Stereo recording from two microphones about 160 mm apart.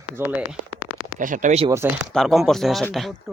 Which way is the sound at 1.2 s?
55° right (ahead or behind).